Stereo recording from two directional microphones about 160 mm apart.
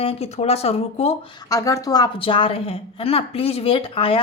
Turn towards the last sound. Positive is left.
turn(degrees=35)  # may be behind; listen again after turning